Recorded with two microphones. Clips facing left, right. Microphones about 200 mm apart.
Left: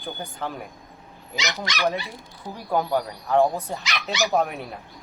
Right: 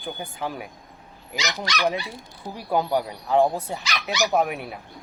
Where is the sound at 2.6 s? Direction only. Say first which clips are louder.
Right 1 dB; 15° right (ahead or behind).